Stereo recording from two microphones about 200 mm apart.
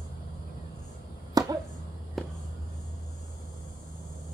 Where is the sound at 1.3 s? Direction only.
20° right (ahead or behind).